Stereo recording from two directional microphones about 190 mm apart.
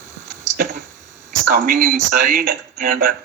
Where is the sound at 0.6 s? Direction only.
50° right (ahead or behind).